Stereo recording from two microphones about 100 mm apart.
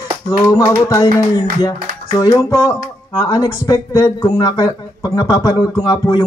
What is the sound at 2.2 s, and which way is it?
Speech, 40° left (ahead or behind).